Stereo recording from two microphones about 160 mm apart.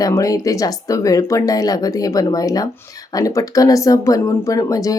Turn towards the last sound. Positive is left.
turn(degrees=20)  # may be behind; listen again after turning